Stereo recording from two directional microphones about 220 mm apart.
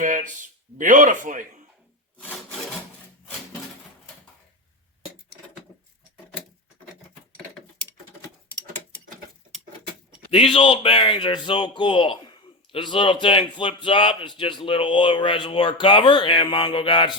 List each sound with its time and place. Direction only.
0.0 s speech: 35° right (ahead or behind)
10.3 s speech: 25° left (ahead or behind)